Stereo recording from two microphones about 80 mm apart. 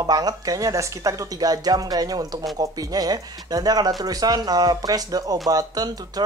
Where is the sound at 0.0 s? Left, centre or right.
Right.